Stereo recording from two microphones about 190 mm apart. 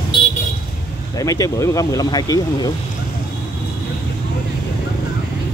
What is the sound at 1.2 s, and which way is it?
Speech, 15° left (ahead or behind).